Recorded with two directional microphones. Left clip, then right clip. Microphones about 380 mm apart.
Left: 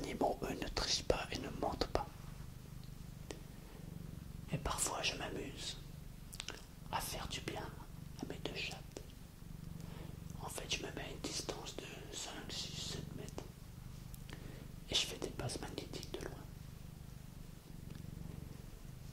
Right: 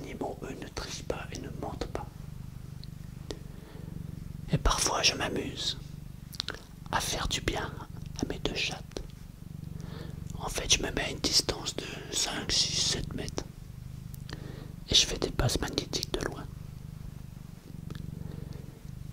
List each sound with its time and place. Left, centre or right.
0.0 s whispering: centre
4.5 s whispering: right
10.4 s whispering: right
14.9 s whispering: right